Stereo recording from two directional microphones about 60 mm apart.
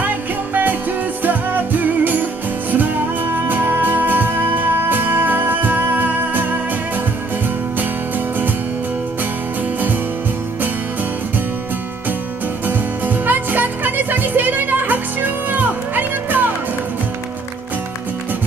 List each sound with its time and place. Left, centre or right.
1.2 s music: right
3.3 s music: right
12.6 s music: right